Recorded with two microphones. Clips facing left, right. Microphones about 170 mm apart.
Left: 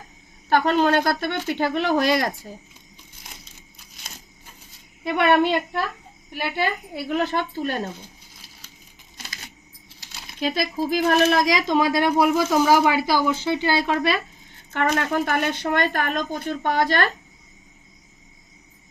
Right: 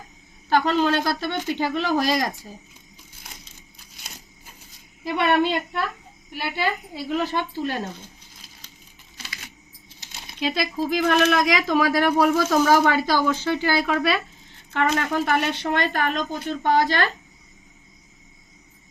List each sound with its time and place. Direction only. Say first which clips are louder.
0.5 s speech: left 2 dB; 50° left (ahead or behind)
5.0 s speech: left 2 dB; 55° left (ahead or behind)
6.6 s speech: even; 60° left (ahead or behind)
10.4 s speech: left 1 dB; 45° left (ahead or behind)
11.7 s speech: even; 20° left (ahead or behind)
14.7 s speech: even; 45° left (ahead or behind)